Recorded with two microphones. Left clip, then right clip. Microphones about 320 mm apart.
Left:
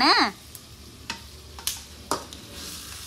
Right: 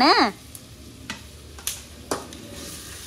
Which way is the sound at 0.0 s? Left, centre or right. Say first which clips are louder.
Right 2 dB; centre.